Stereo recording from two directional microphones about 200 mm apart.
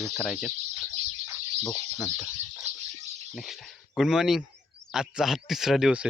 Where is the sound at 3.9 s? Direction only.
Centre (ahead or behind).